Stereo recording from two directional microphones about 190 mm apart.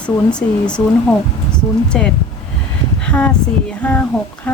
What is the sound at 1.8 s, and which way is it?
Speech, 5° left (ahead or behind).